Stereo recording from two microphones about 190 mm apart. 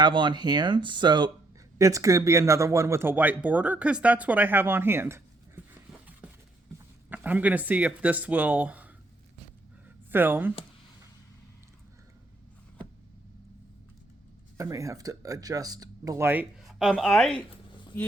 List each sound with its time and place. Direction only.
0.0 s speech: 25° right (ahead or behind)
5.9 s a sound: 10° right (ahead or behind)
6.7 s speech: 10° right (ahead or behind)
10.1 s speech: 10° right (ahead or behind)
14.6 s speech: 15° right (ahead or behind); by 17.4 s centre (ahead or behind)
17.9 s speech: 10° left (ahead or behind)